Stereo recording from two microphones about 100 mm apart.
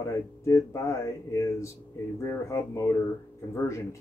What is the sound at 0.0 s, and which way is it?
Speech, 30° left (ahead or behind).